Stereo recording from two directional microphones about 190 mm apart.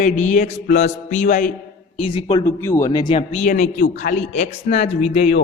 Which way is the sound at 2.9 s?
25° left (ahead or behind).